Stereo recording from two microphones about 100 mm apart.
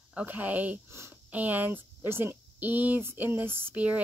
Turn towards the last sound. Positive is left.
turn(degrees=-15)  # may be behind; listen again after turning